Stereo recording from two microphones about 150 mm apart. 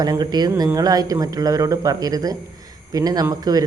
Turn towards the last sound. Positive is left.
turn(degrees=-25)  # may be behind; listen again after turning